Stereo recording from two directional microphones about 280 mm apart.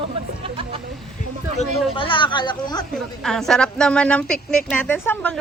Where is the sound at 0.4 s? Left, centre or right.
Centre.